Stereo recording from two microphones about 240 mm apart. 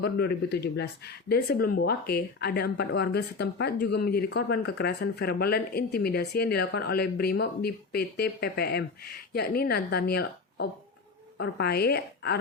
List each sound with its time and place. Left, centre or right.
0.0 s a woman's voice: left